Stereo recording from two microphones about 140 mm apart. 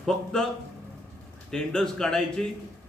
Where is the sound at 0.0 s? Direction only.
5° left (ahead or behind).